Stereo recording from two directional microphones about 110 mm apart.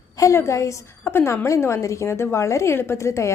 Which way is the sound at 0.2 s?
25° left (ahead or behind).